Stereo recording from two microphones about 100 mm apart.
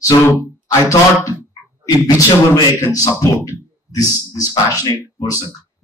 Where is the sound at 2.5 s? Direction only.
35° left (ahead or behind).